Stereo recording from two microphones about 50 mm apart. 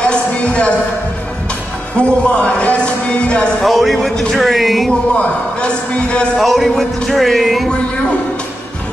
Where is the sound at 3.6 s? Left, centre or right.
Centre.